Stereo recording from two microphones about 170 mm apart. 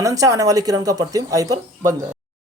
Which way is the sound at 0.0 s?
20° right (ahead or behind).